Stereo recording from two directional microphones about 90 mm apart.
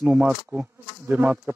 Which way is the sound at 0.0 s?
15° right (ahead or behind).